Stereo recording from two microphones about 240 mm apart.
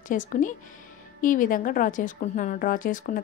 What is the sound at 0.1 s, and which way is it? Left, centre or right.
A woman's voice, left.